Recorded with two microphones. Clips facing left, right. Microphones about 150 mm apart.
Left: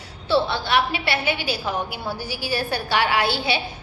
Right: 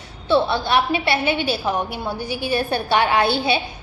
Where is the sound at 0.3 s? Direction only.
20° right (ahead or behind).